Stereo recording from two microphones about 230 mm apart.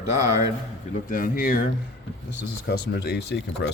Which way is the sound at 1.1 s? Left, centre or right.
Left.